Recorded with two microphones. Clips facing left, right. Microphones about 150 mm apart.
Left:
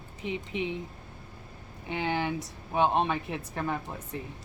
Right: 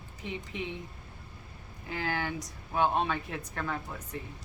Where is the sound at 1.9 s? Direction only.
25° left (ahead or behind).